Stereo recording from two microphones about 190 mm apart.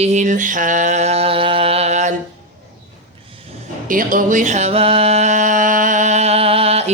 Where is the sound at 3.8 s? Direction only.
45° right (ahead or behind).